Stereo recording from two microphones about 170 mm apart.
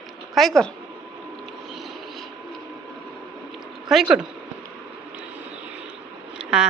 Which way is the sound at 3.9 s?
5° right (ahead or behind).